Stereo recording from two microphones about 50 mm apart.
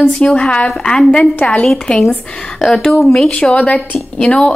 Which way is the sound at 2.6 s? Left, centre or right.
Centre.